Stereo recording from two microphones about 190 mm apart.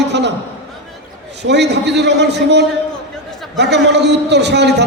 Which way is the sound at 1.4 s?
65° right (ahead or behind).